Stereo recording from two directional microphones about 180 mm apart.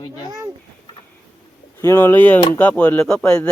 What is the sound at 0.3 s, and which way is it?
Speech, 20° right (ahead or behind).